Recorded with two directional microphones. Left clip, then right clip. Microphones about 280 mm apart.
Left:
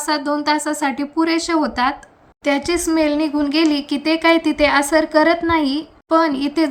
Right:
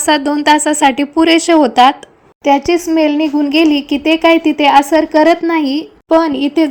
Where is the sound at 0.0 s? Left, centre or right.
Centre.